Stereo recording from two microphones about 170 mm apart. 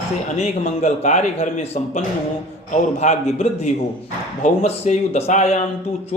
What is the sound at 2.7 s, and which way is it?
A man's voice, 40° left (ahead or behind).